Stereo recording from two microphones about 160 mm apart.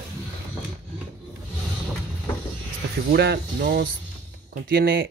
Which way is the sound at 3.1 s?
90° right.